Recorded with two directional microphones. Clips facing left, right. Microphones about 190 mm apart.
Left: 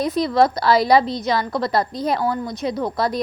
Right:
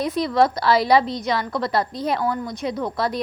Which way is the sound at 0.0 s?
35° left (ahead or behind).